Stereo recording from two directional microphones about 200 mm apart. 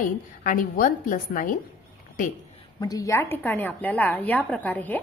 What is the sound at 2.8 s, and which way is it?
A woman's voice, 15° left (ahead or behind).